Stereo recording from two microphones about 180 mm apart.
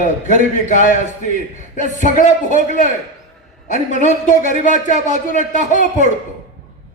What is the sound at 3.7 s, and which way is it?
Speech, 40° right (ahead or behind).